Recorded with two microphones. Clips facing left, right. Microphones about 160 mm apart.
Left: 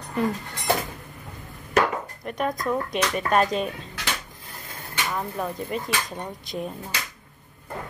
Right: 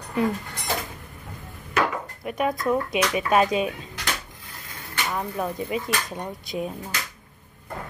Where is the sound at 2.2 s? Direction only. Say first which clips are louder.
Right 3 dB; 5° right (ahead or behind).